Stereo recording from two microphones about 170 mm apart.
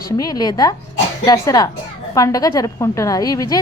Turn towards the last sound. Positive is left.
turn(degrees=20)  # may be behind; listen again after turning